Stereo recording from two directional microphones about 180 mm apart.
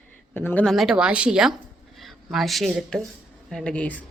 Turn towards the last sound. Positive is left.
turn(degrees=5)  # may be behind; listen again after turning